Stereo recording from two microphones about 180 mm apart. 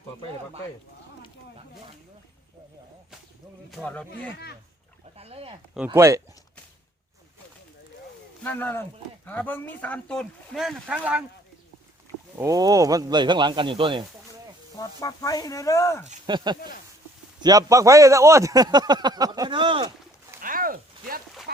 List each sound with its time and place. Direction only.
3.7 s speech: 5° left (ahead or behind)
5.1 s speech: 35° right (ahead or behind)
5.7 s speech: 10° right (ahead or behind)
8.4 s speech: 10° left (ahead or behind); by 11.3 s 5° right (ahead or behind)
12.4 s a man's voice: 20° right (ahead or behind)
14.8 s speech: 20° left (ahead or behind)
16.2 s a man's voice: 25° right (ahead or behind)
16.6 s speech: 55° left (ahead or behind)
17.4 s a man's voice: 20° right (ahead or behind)
20.4 s a sound: 50° right (ahead or behind)